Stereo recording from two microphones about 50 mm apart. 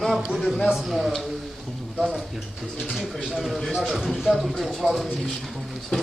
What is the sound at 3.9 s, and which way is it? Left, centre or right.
Speech, centre.